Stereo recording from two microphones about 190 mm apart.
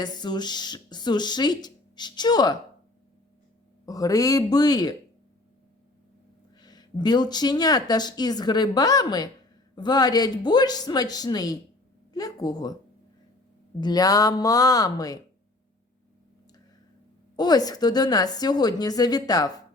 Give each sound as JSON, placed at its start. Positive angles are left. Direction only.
{"t": 0.0, "sound": "speech", "side_deg": 20}
{"t": 3.8, "sound": "speech", "side_deg": 20}
{"t": 6.6, "sound": "speech", "side_deg": 20}
{"t": 13.8, "sound": "speech", "side_deg": 20}
{"t": 17.3, "sound": "speech", "side_deg": 20}